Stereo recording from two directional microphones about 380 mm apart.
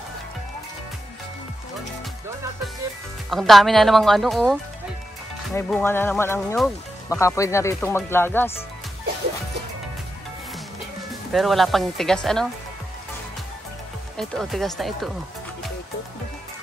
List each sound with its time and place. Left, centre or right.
3.3 s speech: centre
11.3 s speech: centre
14.1 s speech: centre